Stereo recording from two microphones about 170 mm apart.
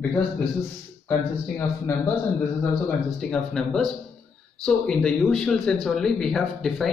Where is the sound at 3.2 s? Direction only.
5° left (ahead or behind).